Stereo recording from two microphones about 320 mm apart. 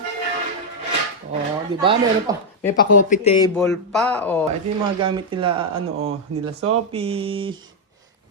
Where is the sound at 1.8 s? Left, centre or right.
Centre.